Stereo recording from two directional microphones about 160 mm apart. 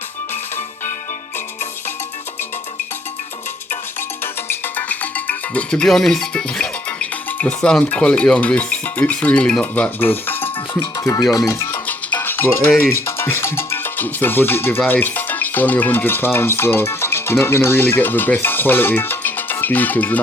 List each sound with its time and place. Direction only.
4.2 s speech: 15° left (ahead or behind)
10.8 s music: 25° left (ahead or behind)
14.8 s speech: 10° left (ahead or behind)